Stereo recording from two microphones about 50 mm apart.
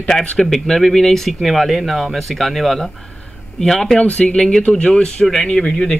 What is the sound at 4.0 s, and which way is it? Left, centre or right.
Speech, left.